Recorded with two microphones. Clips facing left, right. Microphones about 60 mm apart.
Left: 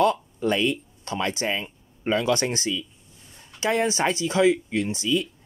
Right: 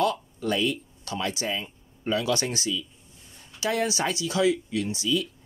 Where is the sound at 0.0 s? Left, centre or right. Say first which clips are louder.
Left 4 dB; left.